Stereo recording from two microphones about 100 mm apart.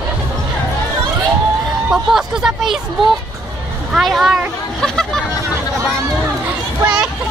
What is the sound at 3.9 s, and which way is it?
Hubbub, 5° right (ahead or behind).